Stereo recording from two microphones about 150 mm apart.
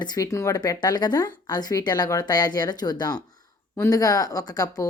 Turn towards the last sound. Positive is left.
turn(degrees=25)  # may be behind; listen again after turning